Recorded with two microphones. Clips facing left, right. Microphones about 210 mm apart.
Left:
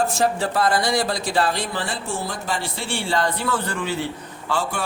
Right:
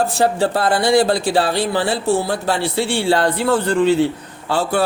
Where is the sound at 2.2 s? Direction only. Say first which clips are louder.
Right 7 dB; 70° right (ahead or behind).